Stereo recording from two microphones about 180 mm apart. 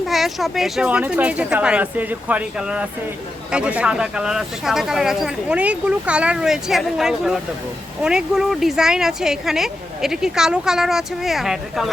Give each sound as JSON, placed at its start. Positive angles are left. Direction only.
{"t": 0.1, "sound": "speech", "side_deg": 0}